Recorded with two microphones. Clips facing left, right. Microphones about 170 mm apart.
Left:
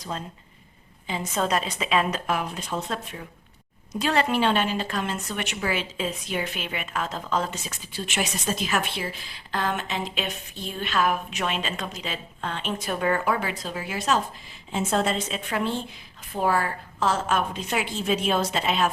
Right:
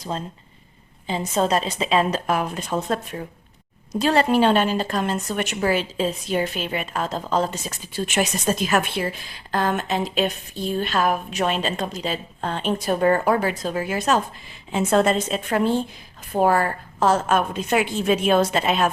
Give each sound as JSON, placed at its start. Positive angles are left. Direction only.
{"t": 1.0, "sound": "a woman's voice", "side_deg": -30}
{"t": 3.9, "sound": "a woman's voice", "side_deg": -35}
{"t": 14.7, "sound": "a woman's voice", "side_deg": -65}